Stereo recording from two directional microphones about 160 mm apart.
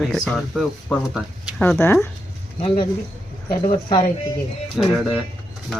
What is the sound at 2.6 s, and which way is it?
Speech, 35° left (ahead or behind).